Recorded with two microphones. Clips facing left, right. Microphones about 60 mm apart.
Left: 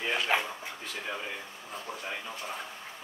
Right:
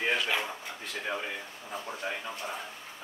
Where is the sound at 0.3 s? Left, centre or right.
Left.